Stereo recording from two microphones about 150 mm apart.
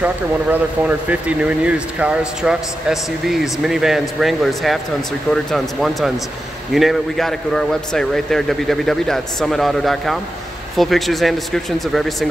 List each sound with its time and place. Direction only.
0.0 s speech: 10° right (ahead or behind)